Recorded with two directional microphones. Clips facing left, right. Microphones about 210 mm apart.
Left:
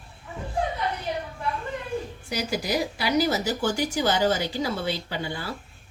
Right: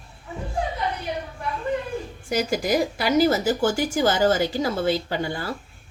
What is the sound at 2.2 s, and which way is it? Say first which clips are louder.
A woman's voice: right 7 dB; 50° right (ahead or behind).